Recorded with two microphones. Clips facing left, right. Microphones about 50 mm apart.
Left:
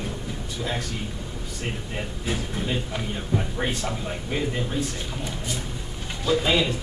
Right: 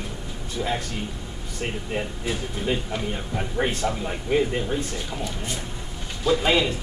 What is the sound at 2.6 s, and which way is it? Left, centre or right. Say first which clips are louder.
Speech: right 2 dB; centre.